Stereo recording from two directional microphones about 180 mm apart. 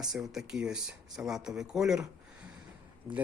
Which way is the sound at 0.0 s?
Centre (ahead or behind).